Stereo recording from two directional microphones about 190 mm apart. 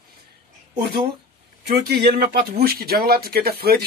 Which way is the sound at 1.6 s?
55° right (ahead or behind).